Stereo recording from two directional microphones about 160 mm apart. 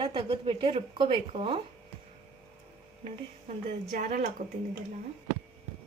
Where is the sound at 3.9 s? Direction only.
60° right (ahead or behind).